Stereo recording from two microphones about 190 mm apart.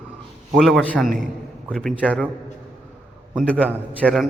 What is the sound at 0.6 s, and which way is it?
A man's voice, 5° left (ahead or behind).